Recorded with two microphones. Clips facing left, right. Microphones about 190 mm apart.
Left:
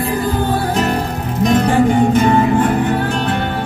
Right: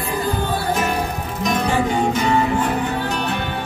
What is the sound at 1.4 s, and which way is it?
Music, 55° left (ahead or behind).